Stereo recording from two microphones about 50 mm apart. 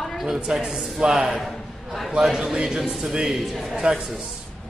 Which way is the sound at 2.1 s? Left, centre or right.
Centre.